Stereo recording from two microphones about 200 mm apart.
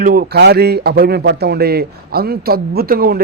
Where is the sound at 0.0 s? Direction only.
45° right (ahead or behind).